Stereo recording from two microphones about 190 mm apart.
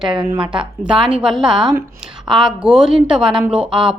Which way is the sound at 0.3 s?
5° right (ahead or behind).